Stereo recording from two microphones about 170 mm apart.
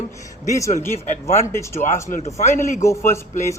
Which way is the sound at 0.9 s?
40° left (ahead or behind).